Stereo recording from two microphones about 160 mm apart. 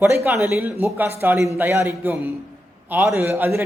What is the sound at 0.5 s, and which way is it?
Speech, 15° right (ahead or behind).